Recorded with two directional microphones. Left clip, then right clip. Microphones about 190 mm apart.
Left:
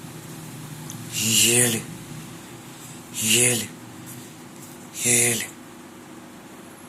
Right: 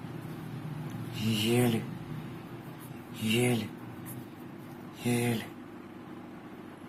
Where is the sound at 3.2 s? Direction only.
5° left (ahead or behind).